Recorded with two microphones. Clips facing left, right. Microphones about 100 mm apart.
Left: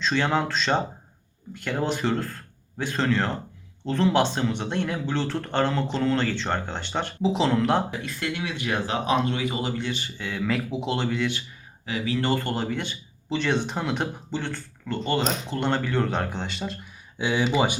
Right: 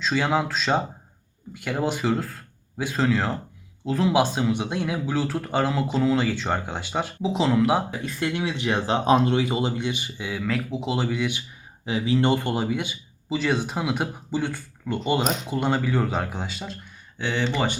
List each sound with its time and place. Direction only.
0.0 s speech: 5° right (ahead or behind)
8.0 s speech: 20° right (ahead or behind)
10.4 s speech: centre (ahead or behind)
11.9 s speech: 25° right (ahead or behind); by 17.7 s 10° left (ahead or behind)